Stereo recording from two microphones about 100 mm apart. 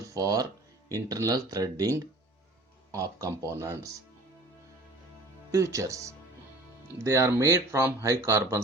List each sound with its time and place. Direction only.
0.1 s speech: 35° right (ahead or behind)
2.9 s speech: 35° right (ahead or behind)
5.5 s speech: 30° right (ahead or behind)